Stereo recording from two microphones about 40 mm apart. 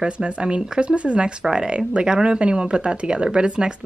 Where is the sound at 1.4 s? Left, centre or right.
Centre.